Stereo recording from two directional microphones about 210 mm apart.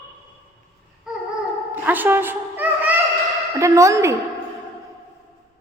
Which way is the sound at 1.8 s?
10° right (ahead or behind).